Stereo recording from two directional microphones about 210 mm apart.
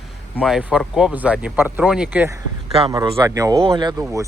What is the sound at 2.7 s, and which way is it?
A man's voice, 25° right (ahead or behind).